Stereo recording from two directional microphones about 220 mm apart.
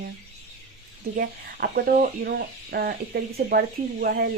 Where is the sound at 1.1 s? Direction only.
45° right (ahead or behind).